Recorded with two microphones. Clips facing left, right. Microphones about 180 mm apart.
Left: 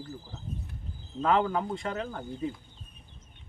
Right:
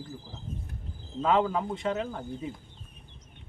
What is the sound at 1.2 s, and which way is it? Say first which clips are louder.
Speech: right 1 dB; 5° right (ahead or behind).